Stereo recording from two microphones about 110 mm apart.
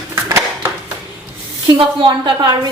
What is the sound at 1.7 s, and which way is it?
Speech, 50° right (ahead or behind).